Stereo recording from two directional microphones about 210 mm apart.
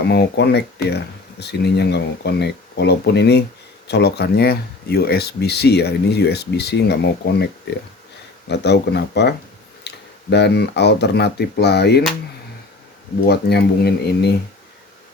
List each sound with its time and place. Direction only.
0.1 s speech: 50° left (ahead or behind)
8.4 s speech: 55° left (ahead or behind)
13.2 s speech: 50° left (ahead or behind)